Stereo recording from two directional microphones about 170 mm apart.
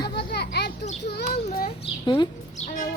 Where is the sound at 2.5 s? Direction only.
40° left (ahead or behind).